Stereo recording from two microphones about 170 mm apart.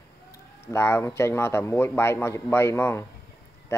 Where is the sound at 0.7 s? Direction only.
15° left (ahead or behind).